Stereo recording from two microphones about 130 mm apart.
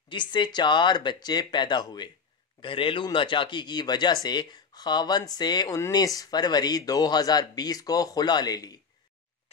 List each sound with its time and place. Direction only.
0.1 s speech: 35° left (ahead or behind)